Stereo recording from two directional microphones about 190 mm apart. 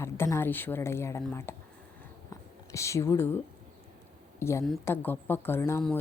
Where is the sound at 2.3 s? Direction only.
15° left (ahead or behind).